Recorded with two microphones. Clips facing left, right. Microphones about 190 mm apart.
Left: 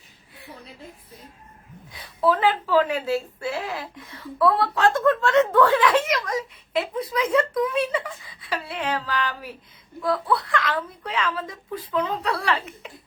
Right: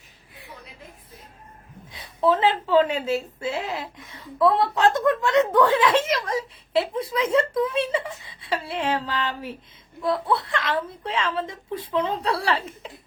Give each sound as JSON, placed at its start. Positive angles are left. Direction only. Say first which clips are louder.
{"t": 1.9, "sound": "a woman's voice", "louder": "right 1 dB", "side_deg": -25}